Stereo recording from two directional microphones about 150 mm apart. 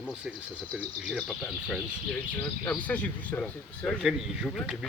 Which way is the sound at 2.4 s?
15° left (ahead or behind).